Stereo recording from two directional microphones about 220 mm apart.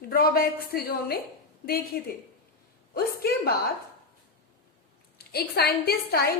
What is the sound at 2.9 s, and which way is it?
Speech, 45° left (ahead or behind).